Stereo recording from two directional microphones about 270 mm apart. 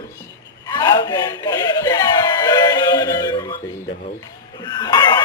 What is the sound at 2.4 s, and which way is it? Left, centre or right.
Synthetic singing, centre.